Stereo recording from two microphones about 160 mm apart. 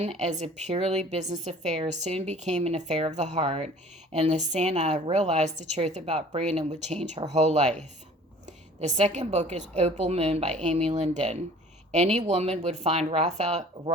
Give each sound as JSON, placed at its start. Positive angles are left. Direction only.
{"t": 0.0, "sound": "speech", "side_deg": -45}